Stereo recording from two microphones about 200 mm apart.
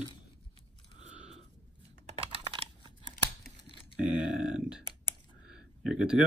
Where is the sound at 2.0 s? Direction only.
30° right (ahead or behind).